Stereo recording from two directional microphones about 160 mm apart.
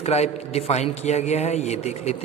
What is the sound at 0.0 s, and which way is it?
A man's voice, 40° left (ahead or behind).